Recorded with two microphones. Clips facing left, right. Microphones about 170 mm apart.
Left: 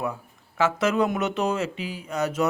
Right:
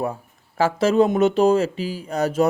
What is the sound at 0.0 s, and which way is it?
A man's voice, 35° right (ahead or behind).